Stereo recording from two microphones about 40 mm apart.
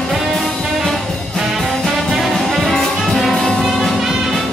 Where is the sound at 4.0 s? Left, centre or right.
Centre.